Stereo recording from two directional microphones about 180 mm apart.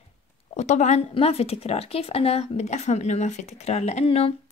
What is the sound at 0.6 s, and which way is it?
A woman's voice, 40° left (ahead or behind).